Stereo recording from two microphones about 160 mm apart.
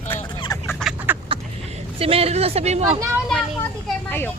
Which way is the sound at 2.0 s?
35° right (ahead or behind).